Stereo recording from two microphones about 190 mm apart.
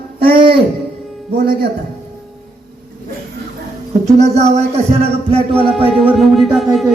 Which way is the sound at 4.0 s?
35° right (ahead or behind).